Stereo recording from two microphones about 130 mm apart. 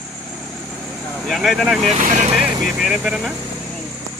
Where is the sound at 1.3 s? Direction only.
Centre (ahead or behind).